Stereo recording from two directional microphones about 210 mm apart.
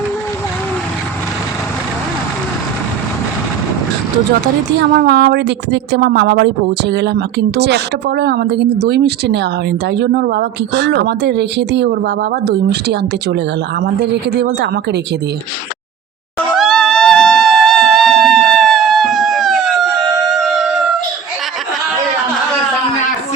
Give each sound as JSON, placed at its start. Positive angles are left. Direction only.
{"t": 4.8, "sound": "a woman's voice", "side_deg": -50}
{"t": 16.6, "sound": "music", "side_deg": 0}